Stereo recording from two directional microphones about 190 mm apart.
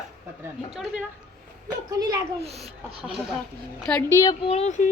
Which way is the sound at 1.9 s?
20° right (ahead or behind).